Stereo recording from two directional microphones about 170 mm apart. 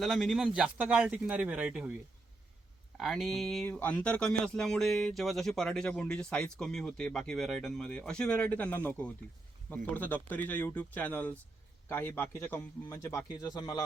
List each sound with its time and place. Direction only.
0.0 s a man's voice: centre (ahead or behind)
3.0 s a man's voice: centre (ahead or behind); by 13.8 s 20° left (ahead or behind)